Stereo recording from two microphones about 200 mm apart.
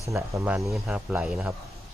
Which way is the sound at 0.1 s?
10° right (ahead or behind).